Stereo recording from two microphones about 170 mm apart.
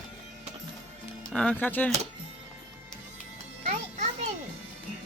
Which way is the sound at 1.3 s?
5° left (ahead or behind).